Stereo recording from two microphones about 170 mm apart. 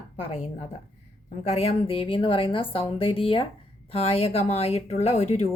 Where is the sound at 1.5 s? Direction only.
35° left (ahead or behind).